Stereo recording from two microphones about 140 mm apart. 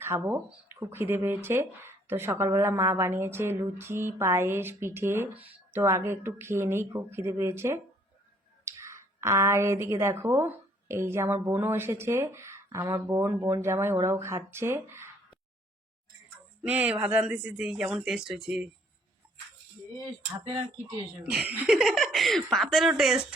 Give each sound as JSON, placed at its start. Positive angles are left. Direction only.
{"t": 0.0, "sound": "speech", "side_deg": -15}
{"t": 16.6, "sound": "speech", "side_deg": -10}
{"t": 21.2, "sound": "speech", "side_deg": -10}
{"t": 21.8, "sound": "speech", "side_deg": 0}